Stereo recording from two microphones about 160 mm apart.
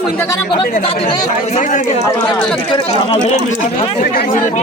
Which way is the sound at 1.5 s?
50° left (ahead or behind).